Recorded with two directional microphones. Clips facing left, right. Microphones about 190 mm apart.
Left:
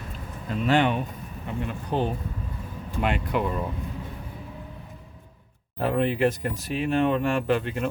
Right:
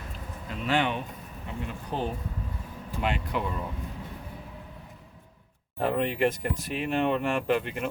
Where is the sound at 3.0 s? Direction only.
55° left (ahead or behind).